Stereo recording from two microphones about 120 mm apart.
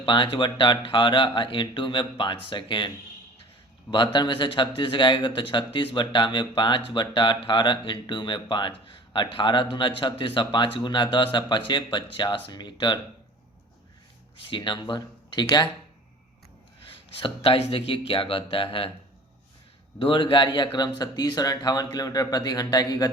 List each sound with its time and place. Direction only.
0.0 s speech: 40° left (ahead or behind)
3.9 s speech: 40° left (ahead or behind)
14.5 s speech: 40° left (ahead or behind)
17.2 s speech: 50° left (ahead or behind)
20.0 s speech: 45° left (ahead or behind)